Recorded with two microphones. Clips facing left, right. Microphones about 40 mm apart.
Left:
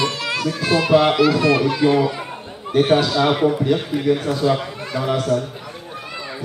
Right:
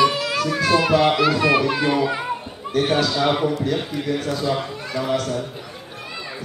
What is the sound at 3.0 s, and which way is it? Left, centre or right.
A man's voice, centre.